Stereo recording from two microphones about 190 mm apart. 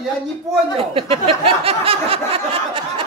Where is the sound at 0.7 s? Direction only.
30° right (ahead or behind).